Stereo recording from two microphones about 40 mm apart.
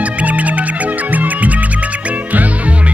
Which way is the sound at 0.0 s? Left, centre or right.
Right.